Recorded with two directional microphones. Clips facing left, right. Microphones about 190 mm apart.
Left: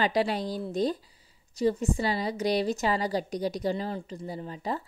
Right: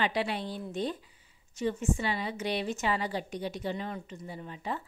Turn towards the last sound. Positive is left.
turn(degrees=35)  # may be behind; listen again after turning